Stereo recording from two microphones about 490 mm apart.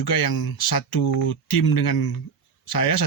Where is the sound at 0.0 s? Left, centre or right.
Left.